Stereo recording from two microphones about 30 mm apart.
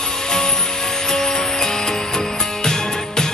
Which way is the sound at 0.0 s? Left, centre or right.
Left.